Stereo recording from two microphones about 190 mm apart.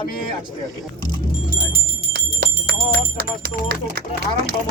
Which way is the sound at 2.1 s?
60° right (ahead or behind).